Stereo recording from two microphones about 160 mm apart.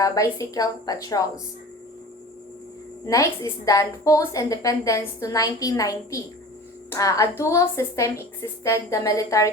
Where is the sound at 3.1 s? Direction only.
20° left (ahead or behind).